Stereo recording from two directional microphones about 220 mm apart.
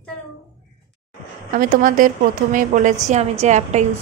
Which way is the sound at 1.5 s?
40° right (ahead or behind).